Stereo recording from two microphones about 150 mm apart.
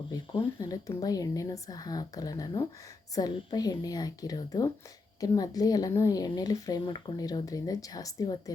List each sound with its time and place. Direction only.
0.6 s speech: 25° left (ahead or behind)